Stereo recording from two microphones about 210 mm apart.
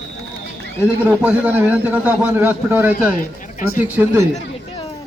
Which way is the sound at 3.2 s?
40° left (ahead or behind).